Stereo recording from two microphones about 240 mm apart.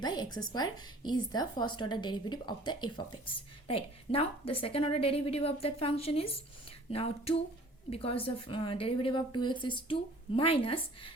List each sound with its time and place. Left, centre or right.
0.0 s a woman's voice: centre